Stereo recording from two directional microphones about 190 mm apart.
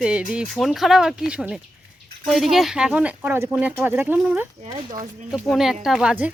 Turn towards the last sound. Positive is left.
turn(degrees=-5)  # may be behind; listen again after turning